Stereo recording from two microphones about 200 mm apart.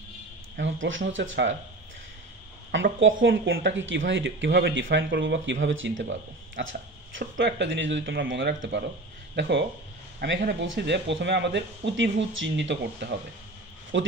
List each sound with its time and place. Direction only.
0.6 s speech: 70° right (ahead or behind)
2.7 s speech: 65° right (ahead or behind)